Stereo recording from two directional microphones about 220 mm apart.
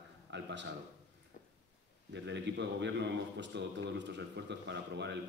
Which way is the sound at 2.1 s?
50° right (ahead or behind).